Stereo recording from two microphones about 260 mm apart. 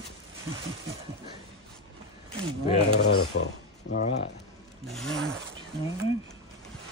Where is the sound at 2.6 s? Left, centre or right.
Left.